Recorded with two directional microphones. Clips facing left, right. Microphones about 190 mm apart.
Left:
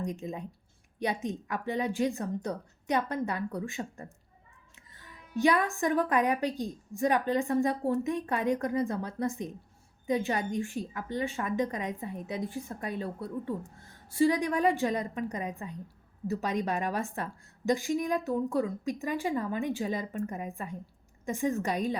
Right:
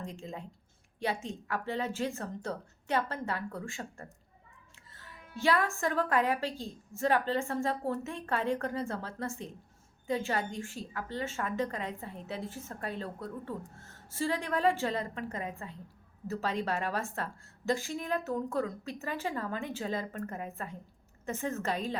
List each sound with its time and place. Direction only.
0.0 s a woman's voice: 20° left (ahead or behind)